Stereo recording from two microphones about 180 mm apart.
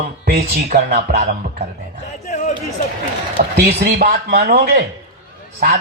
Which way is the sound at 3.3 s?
60° right (ahead or behind).